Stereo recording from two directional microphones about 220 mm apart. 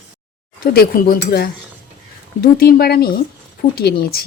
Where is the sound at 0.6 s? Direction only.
40° left (ahead or behind).